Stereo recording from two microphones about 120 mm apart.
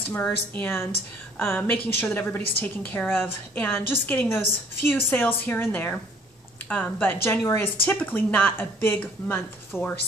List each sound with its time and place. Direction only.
0.6 s a woman's voice: 20° left (ahead or behind)